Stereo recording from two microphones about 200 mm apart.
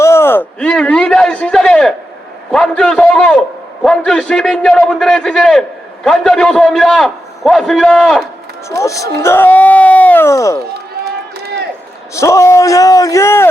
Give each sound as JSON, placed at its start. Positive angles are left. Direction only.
{"t": 0.0, "sound": "a sound", "side_deg": 10}
{"t": 2.5, "sound": "a man's voice", "side_deg": 5}
{"t": 8.7, "sound": "speech", "side_deg": 15}
{"t": 11.0, "sound": "run", "side_deg": -55}
{"t": 12.1, "sound": "speech", "side_deg": 15}